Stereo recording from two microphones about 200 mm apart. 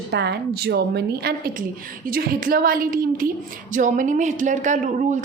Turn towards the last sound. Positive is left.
turn(degrees=-40)  # may be behind; listen again after turning